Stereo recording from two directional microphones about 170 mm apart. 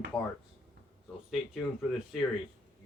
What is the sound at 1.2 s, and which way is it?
Speech, centre (ahead or behind).